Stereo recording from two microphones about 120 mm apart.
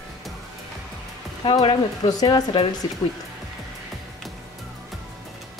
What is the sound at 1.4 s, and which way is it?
A woman's voice, 45° left (ahead or behind).